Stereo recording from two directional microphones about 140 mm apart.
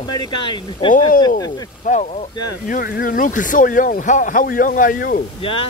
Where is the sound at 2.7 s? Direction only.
90° left.